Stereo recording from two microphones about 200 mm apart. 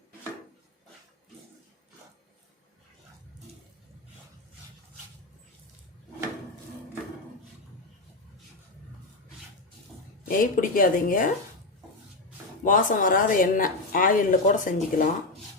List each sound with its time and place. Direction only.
10.2 s speech: 45° left (ahead or behind)
12.6 s speech: 40° left (ahead or behind)